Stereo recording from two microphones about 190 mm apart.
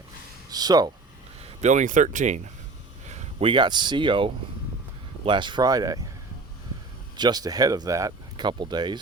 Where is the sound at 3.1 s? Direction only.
35° right (ahead or behind).